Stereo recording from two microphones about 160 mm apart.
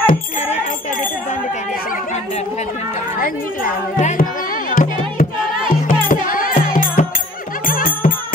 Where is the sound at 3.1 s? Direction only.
60° left (ahead or behind).